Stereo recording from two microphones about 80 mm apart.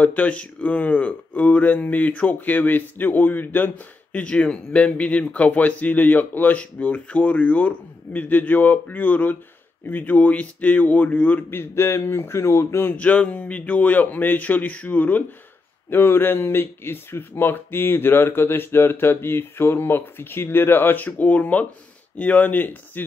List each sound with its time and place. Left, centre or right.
0.0 s speech: centre
11.7 s speech: left
12.9 s speech: centre